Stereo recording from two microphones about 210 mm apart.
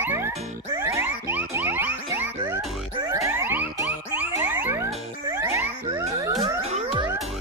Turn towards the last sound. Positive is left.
turn(degrees=-30)  # may be behind; listen again after turning